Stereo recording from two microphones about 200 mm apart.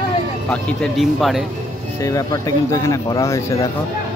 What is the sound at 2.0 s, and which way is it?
Speech, 15° left (ahead or behind).